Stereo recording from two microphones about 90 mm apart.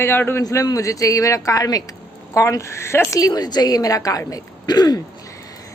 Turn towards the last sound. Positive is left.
turn(degrees=50)  # may be behind; listen again after turning